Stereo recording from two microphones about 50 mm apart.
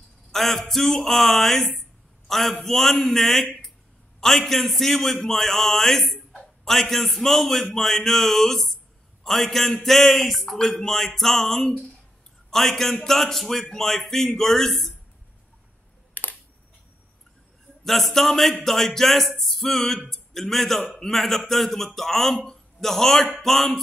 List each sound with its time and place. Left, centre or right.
0.3 s a man's voice: centre
17.8 s a man's voice: centre